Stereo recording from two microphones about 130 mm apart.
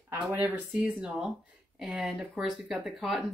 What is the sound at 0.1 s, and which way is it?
Speech, 15° right (ahead or behind).